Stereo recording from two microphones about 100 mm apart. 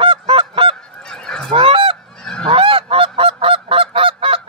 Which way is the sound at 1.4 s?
65° right (ahead or behind).